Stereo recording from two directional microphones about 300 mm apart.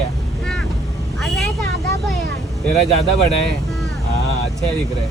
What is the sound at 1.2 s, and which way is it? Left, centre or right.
Speech, centre.